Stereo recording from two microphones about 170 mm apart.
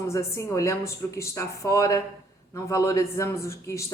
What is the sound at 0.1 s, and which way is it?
A man's voice, 15° left (ahead or behind).